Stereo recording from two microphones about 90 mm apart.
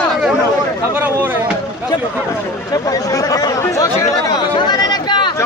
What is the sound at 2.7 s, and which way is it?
Speech, 40° left (ahead or behind).